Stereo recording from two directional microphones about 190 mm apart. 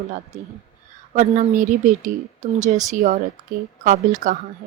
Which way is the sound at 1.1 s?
40° right (ahead or behind).